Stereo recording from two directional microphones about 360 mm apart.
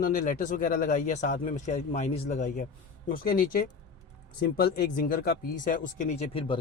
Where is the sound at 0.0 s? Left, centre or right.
Left.